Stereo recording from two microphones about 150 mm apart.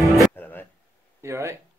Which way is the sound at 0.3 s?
15° left (ahead or behind).